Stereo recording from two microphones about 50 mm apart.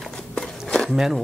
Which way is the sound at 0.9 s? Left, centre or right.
Centre.